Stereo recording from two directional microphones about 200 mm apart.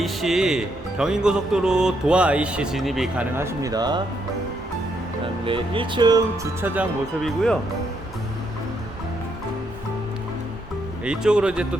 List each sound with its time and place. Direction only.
0.0 s speech: centre (ahead or behind)
3.3 s speech: 15° right (ahead or behind)
5.5 s speech: 25° right (ahead or behind)
7.2 s speech: centre (ahead or behind)
11.0 s speech: 5° right (ahead or behind)